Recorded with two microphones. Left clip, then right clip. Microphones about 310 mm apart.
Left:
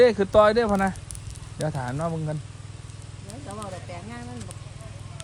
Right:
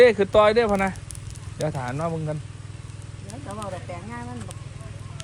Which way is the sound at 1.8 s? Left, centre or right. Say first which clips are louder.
Right 1 dB; left.